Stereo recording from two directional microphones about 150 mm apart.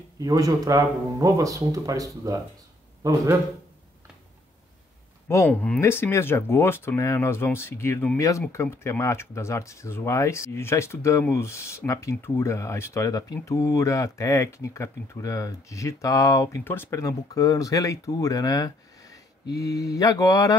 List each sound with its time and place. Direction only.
0.2 s speech: 25° right (ahead or behind)
5.3 s speech: 10° left (ahead or behind)